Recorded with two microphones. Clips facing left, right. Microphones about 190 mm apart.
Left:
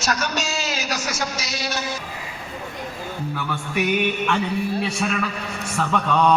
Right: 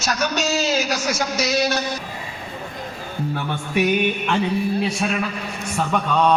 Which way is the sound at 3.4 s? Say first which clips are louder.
Right 2 dB; 30° right (ahead or behind).